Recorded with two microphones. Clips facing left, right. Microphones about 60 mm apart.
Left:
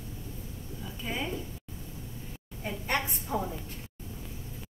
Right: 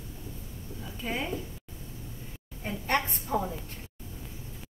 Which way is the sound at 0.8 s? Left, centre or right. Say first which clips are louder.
Right 2 dB; centre.